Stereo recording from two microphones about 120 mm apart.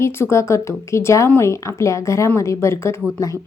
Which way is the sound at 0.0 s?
20° left (ahead or behind).